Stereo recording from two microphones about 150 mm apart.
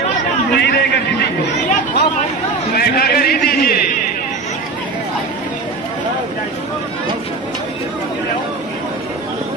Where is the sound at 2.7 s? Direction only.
90° left.